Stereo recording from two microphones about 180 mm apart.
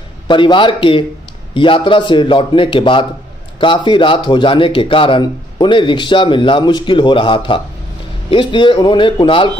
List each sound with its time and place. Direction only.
0.3 s a man's voice: 25° left (ahead or behind)